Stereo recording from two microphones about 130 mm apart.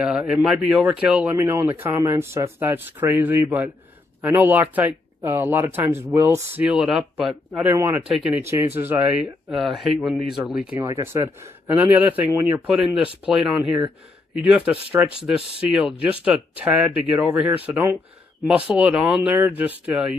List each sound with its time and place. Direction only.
0.0 s speech: 5° right (ahead or behind); by 6.6 s 25° right (ahead or behind)
6.6 s speech: 5° right (ahead or behind)
7.6 s speech: 20° right (ahead or behind)
10.8 s speech: 20° right (ahead or behind)
12.6 s speech: 5° right (ahead or behind)